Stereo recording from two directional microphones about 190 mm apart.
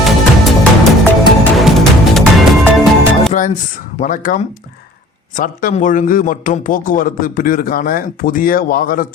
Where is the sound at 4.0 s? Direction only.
45° left (ahead or behind).